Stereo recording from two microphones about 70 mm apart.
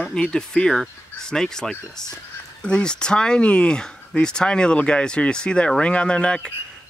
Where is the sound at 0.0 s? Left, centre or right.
Centre.